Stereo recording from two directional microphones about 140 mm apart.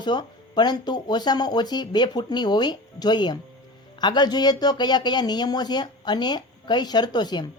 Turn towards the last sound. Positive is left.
turn(degrees=30)  # may be behind; listen again after turning